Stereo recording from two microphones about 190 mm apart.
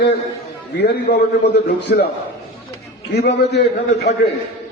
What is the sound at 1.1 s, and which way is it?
Speech, 55° left (ahead or behind).